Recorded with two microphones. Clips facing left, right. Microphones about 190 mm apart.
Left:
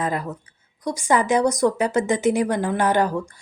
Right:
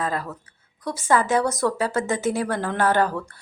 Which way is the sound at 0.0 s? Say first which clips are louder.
Left 2 dB; 20° left (ahead or behind).